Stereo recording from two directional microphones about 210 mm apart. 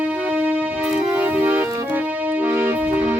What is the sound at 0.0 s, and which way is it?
Music, 10° right (ahead or behind).